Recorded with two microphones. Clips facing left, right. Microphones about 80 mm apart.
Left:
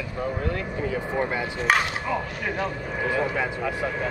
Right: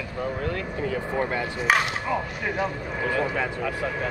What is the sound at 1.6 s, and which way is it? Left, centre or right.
Speech, centre.